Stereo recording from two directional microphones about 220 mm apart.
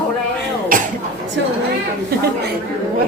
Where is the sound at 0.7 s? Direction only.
40° right (ahead or behind).